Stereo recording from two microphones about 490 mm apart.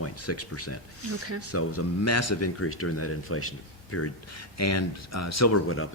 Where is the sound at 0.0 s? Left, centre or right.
Left.